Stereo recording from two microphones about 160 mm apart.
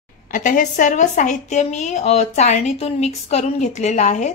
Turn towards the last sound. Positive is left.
turn(degrees=50)  # may be behind; listen again after turning